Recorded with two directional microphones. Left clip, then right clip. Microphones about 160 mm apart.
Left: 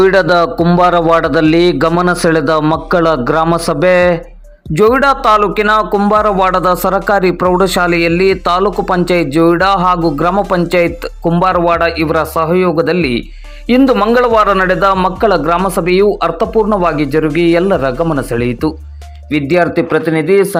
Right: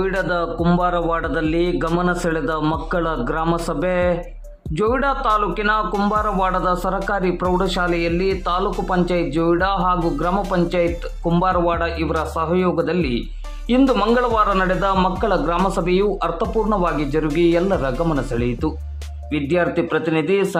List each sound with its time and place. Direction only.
0.0 s a man's voice: 45° left (ahead or behind)
13.9 s speech: 20° left (ahead or behind)
14.2 s speech: 35° left (ahead or behind)